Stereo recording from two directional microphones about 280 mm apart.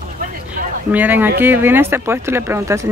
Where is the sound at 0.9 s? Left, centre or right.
Centre.